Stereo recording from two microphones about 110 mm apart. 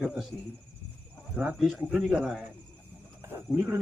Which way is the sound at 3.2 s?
25° right (ahead or behind).